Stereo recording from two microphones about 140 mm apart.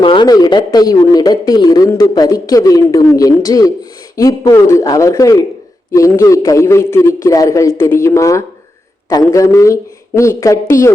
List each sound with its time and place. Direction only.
0.0 s a man's voice: 35° left (ahead or behind)